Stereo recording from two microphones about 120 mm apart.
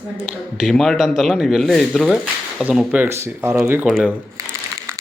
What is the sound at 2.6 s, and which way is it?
Speech, 10° right (ahead or behind).